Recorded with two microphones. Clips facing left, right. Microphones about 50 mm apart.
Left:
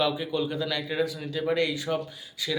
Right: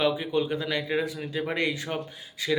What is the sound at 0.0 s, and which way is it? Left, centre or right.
Speech, right.